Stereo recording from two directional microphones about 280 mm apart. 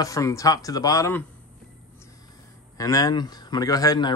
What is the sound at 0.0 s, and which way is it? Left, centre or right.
Speech, centre.